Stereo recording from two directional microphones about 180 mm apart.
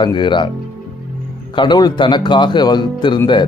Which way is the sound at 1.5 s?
25° left (ahead or behind).